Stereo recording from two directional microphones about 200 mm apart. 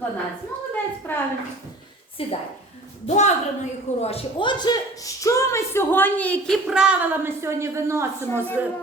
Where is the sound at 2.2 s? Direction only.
30° left (ahead or behind).